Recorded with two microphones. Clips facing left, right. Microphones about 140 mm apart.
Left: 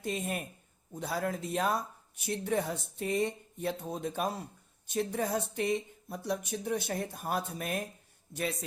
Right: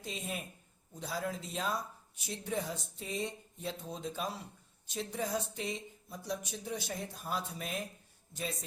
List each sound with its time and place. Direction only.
0.0 s speech: 55° left (ahead or behind)